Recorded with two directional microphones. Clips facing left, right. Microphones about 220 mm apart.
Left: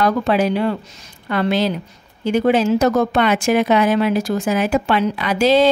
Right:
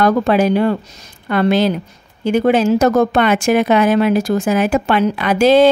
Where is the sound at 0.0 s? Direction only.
50° right (ahead or behind).